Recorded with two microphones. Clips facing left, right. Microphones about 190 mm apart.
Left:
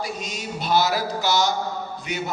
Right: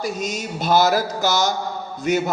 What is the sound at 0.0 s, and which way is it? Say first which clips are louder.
Speech: right 5 dB; 45° right (ahead or behind).